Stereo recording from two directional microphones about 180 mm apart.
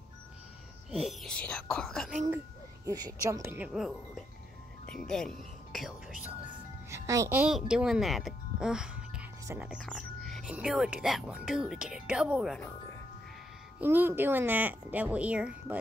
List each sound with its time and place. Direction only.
0.9 s speech: centre (ahead or behind)
2.3 s speech: 20° right (ahead or behind); by 5.9 s centre (ahead or behind)
6.9 s a child's voice: 15° right (ahead or behind)
7.4 s speech: 5° right (ahead or behind)
13.7 s speech: 10° right (ahead or behind)